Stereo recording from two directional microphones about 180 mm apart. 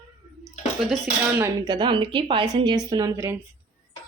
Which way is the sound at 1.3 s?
15° right (ahead or behind).